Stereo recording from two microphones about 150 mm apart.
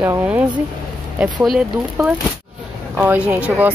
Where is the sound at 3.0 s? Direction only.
10° right (ahead or behind).